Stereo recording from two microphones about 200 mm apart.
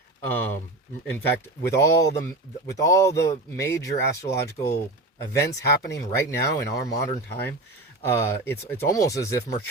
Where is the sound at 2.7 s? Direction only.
15° left (ahead or behind).